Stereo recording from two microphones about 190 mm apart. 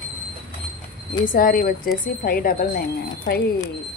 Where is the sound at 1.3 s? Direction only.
45° left (ahead or behind).